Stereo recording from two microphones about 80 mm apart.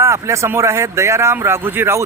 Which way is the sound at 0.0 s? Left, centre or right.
Right.